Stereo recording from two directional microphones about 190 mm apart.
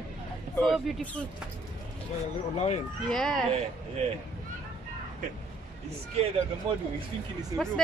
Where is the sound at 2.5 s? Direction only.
35° left (ahead or behind).